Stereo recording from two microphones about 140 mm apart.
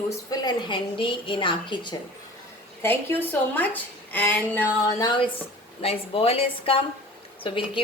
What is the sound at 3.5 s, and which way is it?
Speech, 10° left (ahead or behind).